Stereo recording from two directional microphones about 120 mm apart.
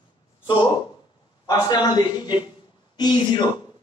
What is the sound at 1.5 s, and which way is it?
A man's voice, 35° left (ahead or behind).